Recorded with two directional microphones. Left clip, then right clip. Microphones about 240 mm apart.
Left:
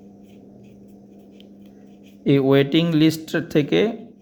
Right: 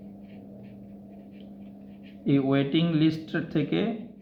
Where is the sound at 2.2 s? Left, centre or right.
Left.